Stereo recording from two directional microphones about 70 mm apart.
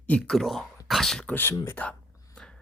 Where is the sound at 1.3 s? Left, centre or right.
Left.